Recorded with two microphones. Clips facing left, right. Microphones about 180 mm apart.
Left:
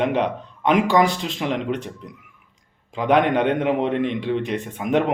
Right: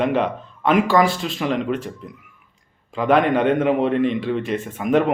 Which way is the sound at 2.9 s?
5° right (ahead or behind).